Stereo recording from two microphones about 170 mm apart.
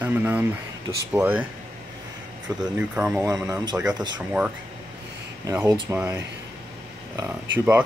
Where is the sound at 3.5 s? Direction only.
25° right (ahead or behind).